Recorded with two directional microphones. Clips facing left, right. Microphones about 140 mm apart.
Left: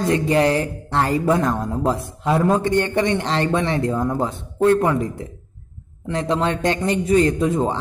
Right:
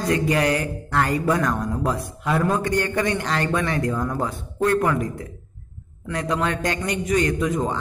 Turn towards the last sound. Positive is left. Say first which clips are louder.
# left 3 dB
turn(degrees=25)  # may be behind; listen again after turning